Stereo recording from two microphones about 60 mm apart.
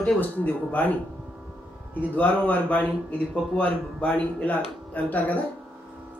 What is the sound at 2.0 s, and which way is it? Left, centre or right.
Speech, left.